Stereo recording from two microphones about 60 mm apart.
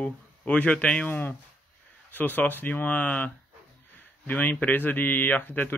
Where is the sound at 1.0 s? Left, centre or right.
Left.